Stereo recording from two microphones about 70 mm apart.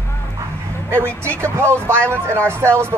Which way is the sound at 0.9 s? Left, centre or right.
Right.